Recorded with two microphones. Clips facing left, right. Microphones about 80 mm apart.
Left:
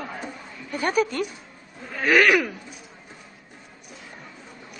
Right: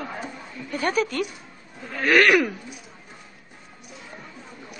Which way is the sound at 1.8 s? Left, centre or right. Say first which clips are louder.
Even; centre.